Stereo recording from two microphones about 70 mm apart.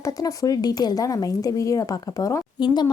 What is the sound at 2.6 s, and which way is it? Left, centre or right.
Speech, left.